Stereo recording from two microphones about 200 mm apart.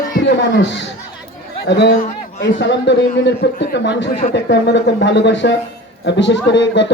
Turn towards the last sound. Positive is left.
turn(degrees=65)  # may be behind; listen again after turning